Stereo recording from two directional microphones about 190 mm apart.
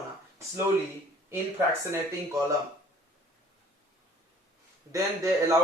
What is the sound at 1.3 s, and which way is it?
Speech, 10° right (ahead or behind).